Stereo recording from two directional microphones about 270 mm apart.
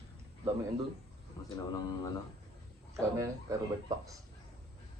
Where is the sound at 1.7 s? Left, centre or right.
Centre.